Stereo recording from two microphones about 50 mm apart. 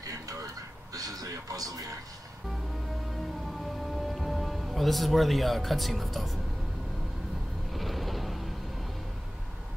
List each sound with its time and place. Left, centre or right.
1.5 s speech: right
3.6 s music: centre
7.7 s vehicle: centre